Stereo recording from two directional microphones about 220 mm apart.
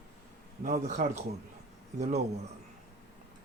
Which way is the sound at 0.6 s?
35° right (ahead or behind).